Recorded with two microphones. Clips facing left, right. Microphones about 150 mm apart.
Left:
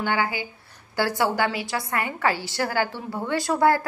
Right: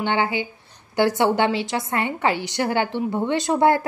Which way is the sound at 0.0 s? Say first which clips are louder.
Right 3 dB; 25° right (ahead or behind).